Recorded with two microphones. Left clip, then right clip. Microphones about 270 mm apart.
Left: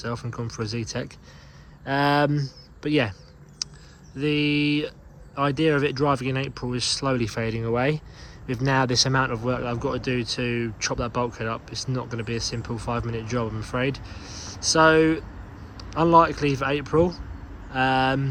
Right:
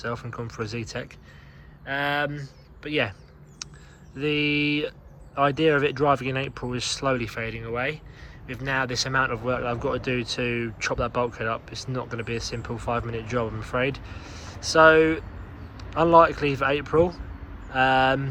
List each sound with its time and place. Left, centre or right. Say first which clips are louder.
0.0 s speech: even; centre
3.6 s a sound: left 7 dB; centre
4.2 s speech: even; centre